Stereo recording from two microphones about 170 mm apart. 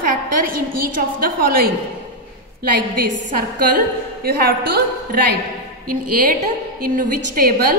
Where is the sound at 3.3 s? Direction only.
60° right (ahead or behind).